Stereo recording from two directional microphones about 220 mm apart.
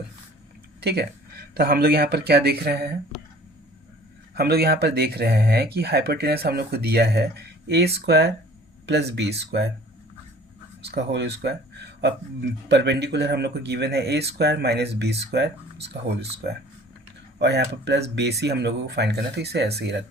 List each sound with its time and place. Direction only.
0.8 s speech: 45° right (ahead or behind)
4.4 s speech: 45° right (ahead or behind)
10.8 s speech: 50° right (ahead or behind)